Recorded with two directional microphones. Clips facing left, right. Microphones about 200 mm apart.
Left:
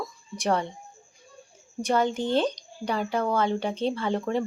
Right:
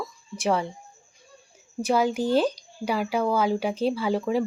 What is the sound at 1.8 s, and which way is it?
Speech, 5° right (ahead or behind).